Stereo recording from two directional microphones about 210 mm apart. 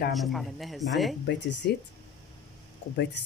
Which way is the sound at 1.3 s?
55° left (ahead or behind).